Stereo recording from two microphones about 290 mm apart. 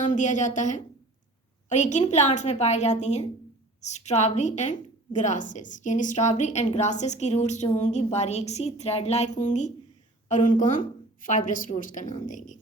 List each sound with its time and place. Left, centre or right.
0.0 s a woman's voice: left